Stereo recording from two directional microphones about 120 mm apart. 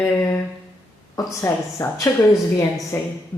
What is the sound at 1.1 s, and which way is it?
Speech, 25° left (ahead or behind).